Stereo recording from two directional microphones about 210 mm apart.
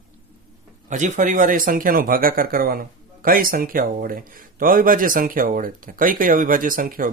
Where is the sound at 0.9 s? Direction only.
35° right (ahead or behind).